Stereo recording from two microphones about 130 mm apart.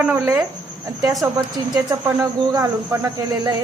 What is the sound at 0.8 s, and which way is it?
Speech, 30° right (ahead or behind).